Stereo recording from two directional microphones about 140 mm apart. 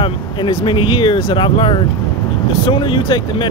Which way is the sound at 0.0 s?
35° left (ahead or behind).